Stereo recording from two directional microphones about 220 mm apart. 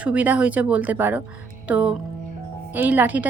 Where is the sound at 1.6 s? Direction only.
5° right (ahead or behind).